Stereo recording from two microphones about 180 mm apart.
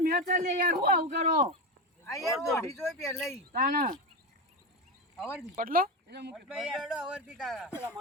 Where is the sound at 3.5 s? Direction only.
50° right (ahead or behind).